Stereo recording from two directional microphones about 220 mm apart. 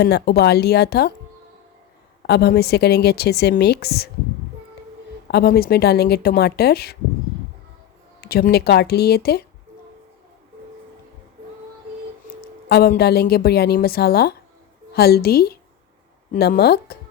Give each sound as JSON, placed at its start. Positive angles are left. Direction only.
{"t": 0.0, "sound": "a woman's voice", "side_deg": 45}
{"t": 2.2, "sound": "a woman's voice", "side_deg": 45}
{"t": 5.3, "sound": "a woman's voice", "side_deg": 45}
{"t": 8.2, "sound": "a woman's voice", "side_deg": 45}
{"t": 12.6, "sound": "a woman's voice", "side_deg": 45}